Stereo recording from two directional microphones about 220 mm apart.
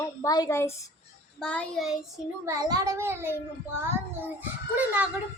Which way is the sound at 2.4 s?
15° right (ahead or behind).